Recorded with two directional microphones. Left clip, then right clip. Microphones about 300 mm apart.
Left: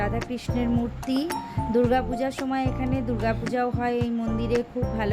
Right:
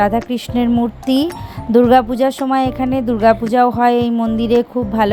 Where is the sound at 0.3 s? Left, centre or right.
Centre.